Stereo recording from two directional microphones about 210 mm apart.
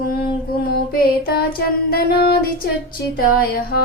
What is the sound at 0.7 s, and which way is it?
Speech, 45° left (ahead or behind).